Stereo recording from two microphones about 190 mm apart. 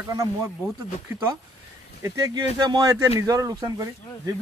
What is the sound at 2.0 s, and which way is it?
Speech, 20° right (ahead or behind).